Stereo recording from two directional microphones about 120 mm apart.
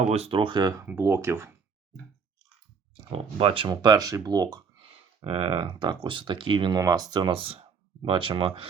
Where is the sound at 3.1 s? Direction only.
50° right (ahead or behind).